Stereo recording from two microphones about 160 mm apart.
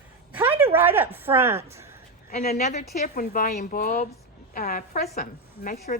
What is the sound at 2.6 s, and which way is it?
Speech, 45° left (ahead or behind).